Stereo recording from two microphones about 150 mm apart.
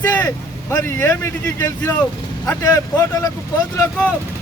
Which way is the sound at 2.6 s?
20° left (ahead or behind).